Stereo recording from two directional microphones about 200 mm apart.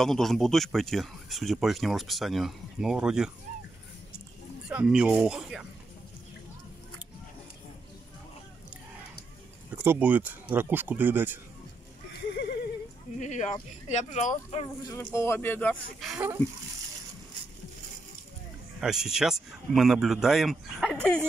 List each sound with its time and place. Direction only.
0.0 s speech: centre (ahead or behind)
4.6 s speech: 5° right (ahead or behind)
9.8 s speech: 10° right (ahead or behind)
13.2 s speech: 35° left (ahead or behind)
14.9 s speech: 15° left (ahead or behind)
18.8 s speech: 5° right (ahead or behind)